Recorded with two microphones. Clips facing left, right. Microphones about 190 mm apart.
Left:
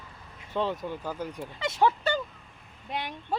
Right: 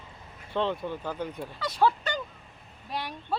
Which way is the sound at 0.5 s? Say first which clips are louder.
Right 1 dB; 10° left (ahead or behind).